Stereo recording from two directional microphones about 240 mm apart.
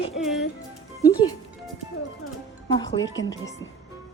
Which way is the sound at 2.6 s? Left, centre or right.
Centre.